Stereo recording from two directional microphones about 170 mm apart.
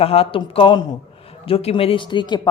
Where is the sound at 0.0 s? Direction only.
35° left (ahead or behind).